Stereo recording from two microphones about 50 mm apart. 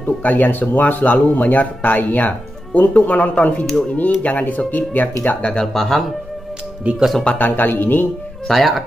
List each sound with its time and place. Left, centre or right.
0.0 s speech: left
5.7 s speech: centre
7.3 s speech: left
8.5 s speech: centre